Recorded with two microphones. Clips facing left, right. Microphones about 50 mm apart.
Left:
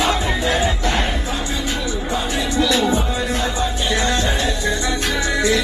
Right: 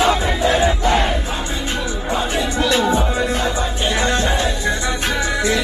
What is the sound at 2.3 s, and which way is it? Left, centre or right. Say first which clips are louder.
Music: left 1 dB; right.